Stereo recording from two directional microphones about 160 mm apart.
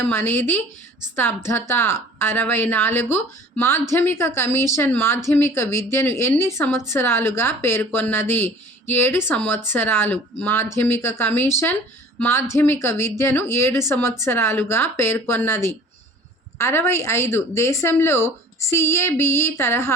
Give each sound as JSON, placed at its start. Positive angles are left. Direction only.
{"t": 0.0, "sound": "a woman's voice", "side_deg": 15}